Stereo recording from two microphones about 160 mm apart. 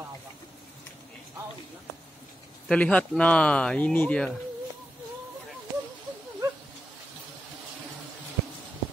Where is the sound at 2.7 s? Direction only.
5° left (ahead or behind).